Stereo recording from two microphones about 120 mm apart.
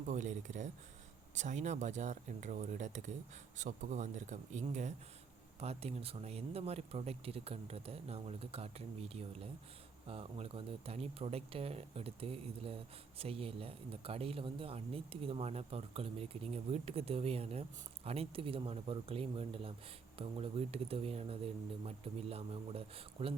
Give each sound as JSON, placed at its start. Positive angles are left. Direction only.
{"t": 0.0, "sound": "speech", "side_deg": -90}
{"t": 5.5, "sound": "speech", "side_deg": -60}